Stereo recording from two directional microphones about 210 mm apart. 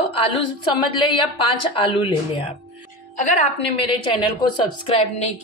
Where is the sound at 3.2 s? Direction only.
35° left (ahead or behind).